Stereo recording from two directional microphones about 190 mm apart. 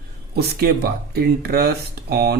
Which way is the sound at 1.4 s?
55° right (ahead or behind).